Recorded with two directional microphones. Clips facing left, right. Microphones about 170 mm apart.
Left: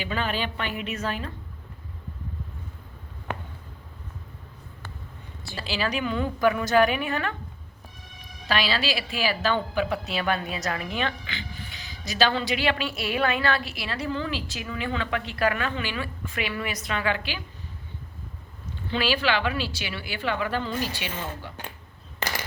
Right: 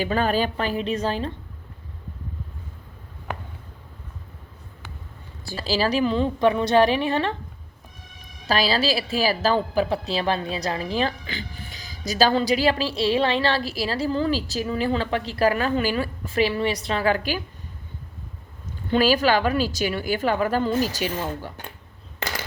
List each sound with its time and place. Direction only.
0.0 s speech: 40° right (ahead or behind)
5.5 s a woman's voice: 40° right (ahead or behind)
8.4 s speech: 35° right (ahead or behind)
18.9 s speech: 40° right (ahead or behind)